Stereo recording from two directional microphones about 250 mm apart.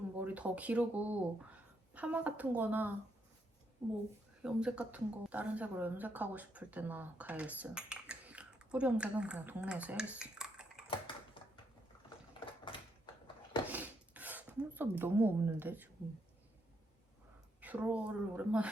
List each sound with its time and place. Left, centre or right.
0.2 s a woman's voice: centre
10.8 s mechanisms: centre
13.7 s a sound: centre
17.6 s a woman's voice: centre